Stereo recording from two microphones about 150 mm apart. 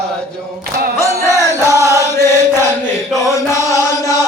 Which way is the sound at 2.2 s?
15° left (ahead or behind).